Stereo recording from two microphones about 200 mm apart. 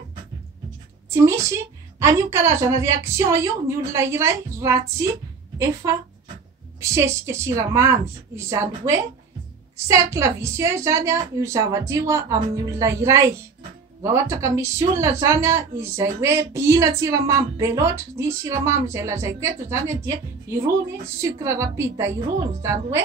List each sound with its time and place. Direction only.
1.1 s a woman's voice: 15° right (ahead or behind)